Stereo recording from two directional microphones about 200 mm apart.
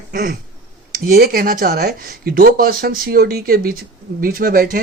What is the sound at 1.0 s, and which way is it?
Speech, 45° right (ahead or behind).